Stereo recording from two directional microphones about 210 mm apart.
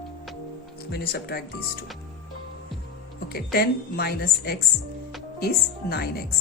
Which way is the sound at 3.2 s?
45° left (ahead or behind).